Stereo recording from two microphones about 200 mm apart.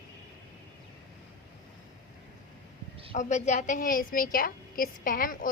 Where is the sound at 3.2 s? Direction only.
35° left (ahead or behind).